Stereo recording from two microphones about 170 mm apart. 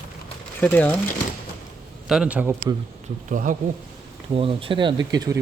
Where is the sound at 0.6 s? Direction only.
10° left (ahead or behind).